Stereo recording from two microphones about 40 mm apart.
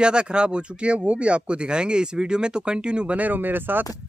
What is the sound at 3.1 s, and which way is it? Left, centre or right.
Speech, right.